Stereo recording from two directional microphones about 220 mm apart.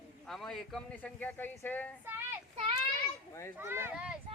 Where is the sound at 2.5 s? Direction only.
25° right (ahead or behind).